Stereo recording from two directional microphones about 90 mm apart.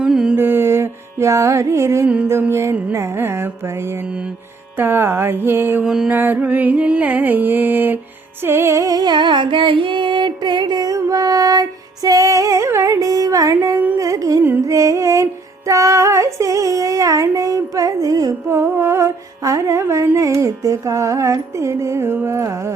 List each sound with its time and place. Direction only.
0.0 s mantra: 5° right (ahead or behind)
0.3 s carnatic music: 25° right (ahead or behind)
2.5 s music: 30° right (ahead or behind)
5.8 s mantra: 5° right (ahead or behind)
6.1 s music: 20° right (ahead or behind)
8.4 s female singing: 25° right (ahead or behind)